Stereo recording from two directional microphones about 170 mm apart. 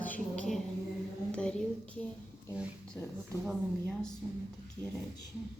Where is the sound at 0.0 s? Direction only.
10° left (ahead or behind).